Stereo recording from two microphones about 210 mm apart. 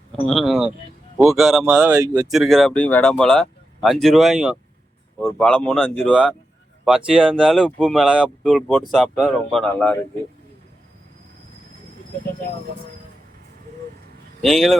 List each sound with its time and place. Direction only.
0.1 s speech: centre (ahead or behind)
2.0 s speech: 20° right (ahead or behind)
2.3 s speech: centre (ahead or behind)
14.4 s speech: centre (ahead or behind)